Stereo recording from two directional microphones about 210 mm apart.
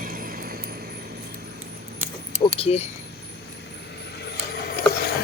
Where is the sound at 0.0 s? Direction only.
40° right (ahead or behind).